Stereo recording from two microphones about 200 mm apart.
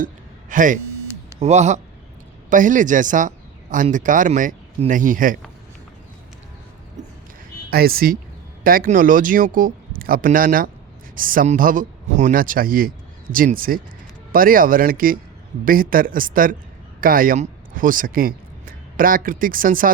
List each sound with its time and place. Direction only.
0.5 s a man's voice: 40° right (ahead or behind)
7.7 s speech: 50° right (ahead or behind)